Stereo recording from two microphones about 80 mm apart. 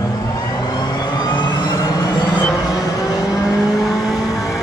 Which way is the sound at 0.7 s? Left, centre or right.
Left.